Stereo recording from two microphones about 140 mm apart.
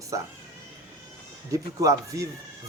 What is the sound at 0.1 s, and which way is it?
Speech, 25° right (ahead or behind).